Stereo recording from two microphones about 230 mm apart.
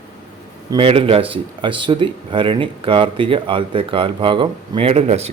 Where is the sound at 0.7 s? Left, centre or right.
Right.